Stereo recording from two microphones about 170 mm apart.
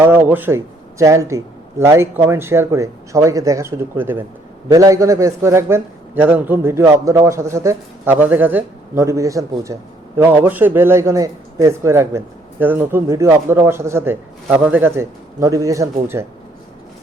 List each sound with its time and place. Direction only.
0.0 s a man's voice: 10° right (ahead or behind)